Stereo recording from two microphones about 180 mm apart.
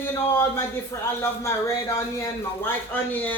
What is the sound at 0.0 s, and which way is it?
Speech, 15° left (ahead or behind).